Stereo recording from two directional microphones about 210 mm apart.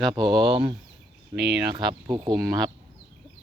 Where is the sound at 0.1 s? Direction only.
20° right (ahead or behind).